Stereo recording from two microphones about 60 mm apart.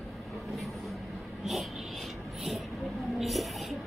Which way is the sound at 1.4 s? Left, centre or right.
Centre.